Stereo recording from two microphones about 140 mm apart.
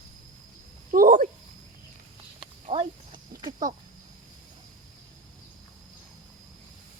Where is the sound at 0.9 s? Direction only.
75° right (ahead or behind).